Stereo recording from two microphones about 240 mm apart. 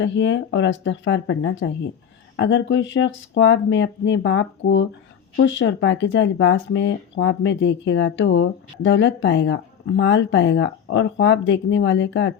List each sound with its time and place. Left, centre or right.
0.0 s speech: left